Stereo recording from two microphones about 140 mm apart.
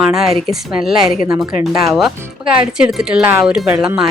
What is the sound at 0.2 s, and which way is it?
A woman's voice, 5° right (ahead or behind).